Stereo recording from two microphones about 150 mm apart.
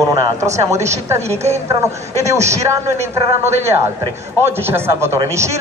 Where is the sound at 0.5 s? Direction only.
50° right (ahead or behind).